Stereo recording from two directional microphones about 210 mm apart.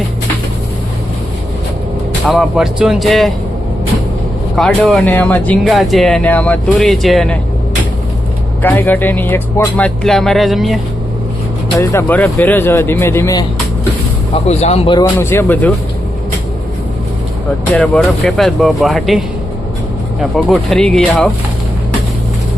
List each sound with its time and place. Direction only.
2.2 s speech: centre (ahead or behind)
4.5 s speech: centre (ahead or behind)
8.6 s speech: 10° left (ahead or behind)
11.8 s speech: 10° left (ahead or behind)
14.4 s speech: 30° left (ahead or behind)
14.9 s speech: 15° left (ahead or behind)
17.7 s speech: 5° left (ahead or behind)
20.3 s speech: centre (ahead or behind)